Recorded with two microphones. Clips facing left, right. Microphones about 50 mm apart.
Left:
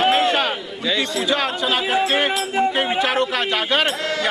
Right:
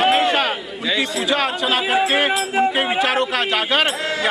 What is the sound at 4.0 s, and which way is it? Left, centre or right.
Speech, right.